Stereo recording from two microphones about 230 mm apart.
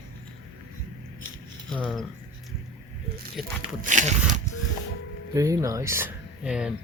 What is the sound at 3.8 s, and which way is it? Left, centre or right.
Speech, right.